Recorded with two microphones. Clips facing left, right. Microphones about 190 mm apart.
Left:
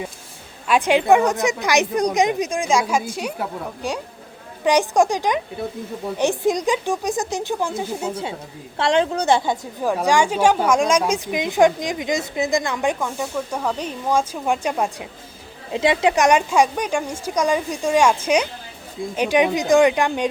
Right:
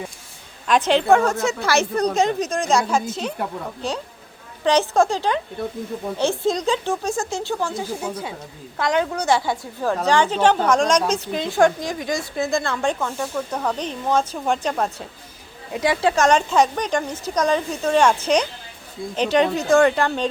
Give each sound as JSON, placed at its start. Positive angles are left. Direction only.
{"t": 0.7, "sound": "a woman's voice", "side_deg": 10}
{"t": 15.7, "sound": "a woman's voice", "side_deg": 20}